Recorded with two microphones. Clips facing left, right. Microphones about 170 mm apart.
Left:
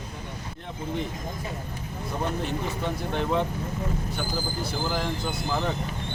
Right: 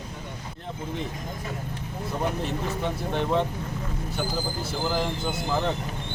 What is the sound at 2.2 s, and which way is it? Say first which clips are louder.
Speech: right 1 dB; centre (ahead or behind).